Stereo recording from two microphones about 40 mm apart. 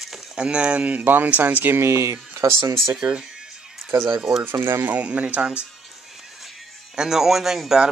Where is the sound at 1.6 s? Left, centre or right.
Right.